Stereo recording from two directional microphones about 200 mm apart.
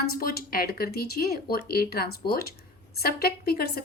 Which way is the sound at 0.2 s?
45° left (ahead or behind).